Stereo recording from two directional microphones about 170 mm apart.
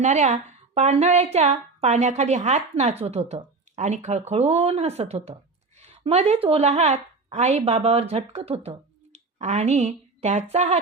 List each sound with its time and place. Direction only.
0.0 s a woman's voice: 45° right (ahead or behind)